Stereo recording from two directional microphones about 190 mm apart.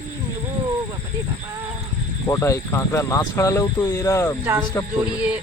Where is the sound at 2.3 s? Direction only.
15° left (ahead or behind).